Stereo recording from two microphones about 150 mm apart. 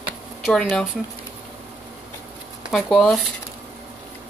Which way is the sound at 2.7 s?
Centre (ahead or behind).